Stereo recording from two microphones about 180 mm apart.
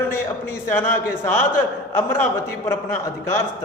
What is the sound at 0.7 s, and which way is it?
A man's voice, 10° left (ahead or behind).